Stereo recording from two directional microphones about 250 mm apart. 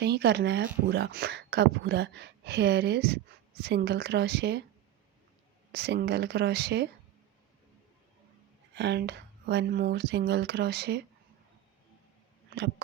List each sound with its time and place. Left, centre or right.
0.0 s speech: right
5.7 s speech: right
8.7 s speech: right
12.5 s speech: right